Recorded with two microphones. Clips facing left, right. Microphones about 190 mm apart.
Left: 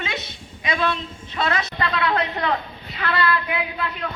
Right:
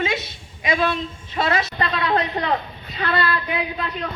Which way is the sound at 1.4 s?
25° right (ahead or behind).